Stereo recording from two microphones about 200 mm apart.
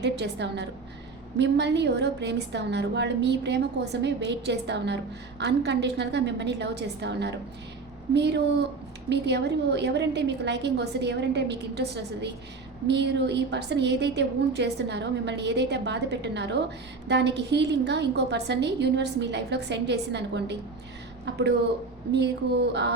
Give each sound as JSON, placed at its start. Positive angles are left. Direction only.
{"t": 0.0, "sound": "a woman's voice", "side_deg": -60}